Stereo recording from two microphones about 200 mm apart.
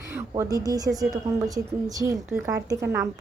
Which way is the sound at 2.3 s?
15° right (ahead or behind).